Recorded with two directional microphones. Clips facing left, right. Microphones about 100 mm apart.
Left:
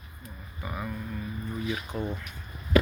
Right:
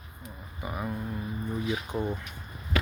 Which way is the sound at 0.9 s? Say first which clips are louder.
Right 2 dB; 25° right (ahead or behind).